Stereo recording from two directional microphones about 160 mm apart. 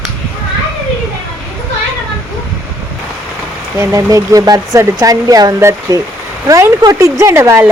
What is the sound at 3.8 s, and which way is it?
A woman's voice, 20° right (ahead or behind).